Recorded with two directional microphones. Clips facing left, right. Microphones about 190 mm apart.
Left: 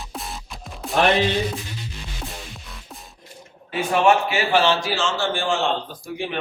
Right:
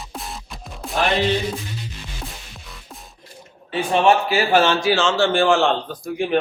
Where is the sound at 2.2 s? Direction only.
Centre (ahead or behind).